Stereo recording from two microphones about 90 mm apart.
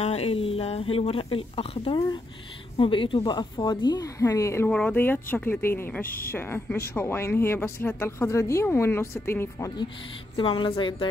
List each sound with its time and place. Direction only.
0.3 s speech: 90° left
2.8 s a woman's voice: 70° left (ahead or behind)
3.2 s speech: 55° left (ahead or behind); by 4.6 s 35° left (ahead or behind)
4.6 s speech: 15° left (ahead or behind)
10.3 s a woman's voice: 70° left (ahead or behind)